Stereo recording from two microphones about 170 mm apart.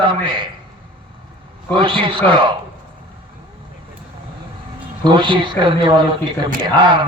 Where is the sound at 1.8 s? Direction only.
30° right (ahead or behind).